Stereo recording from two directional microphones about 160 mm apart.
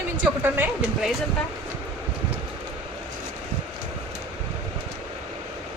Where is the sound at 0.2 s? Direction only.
10° right (ahead or behind).